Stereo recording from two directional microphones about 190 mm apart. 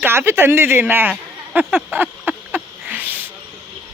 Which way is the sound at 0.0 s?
10° right (ahead or behind).